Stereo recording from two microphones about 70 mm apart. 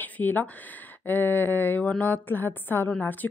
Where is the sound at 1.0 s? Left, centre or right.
Left.